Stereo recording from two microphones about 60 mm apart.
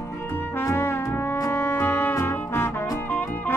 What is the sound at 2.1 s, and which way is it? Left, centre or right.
Music, left.